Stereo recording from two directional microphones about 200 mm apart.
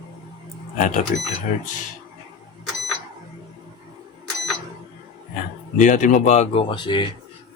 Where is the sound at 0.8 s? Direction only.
40° left (ahead or behind).